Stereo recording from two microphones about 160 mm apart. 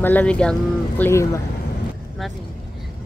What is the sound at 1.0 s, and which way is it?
Speech, 15° left (ahead or behind).